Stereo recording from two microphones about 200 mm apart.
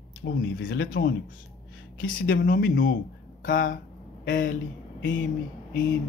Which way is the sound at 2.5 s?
45° left (ahead or behind).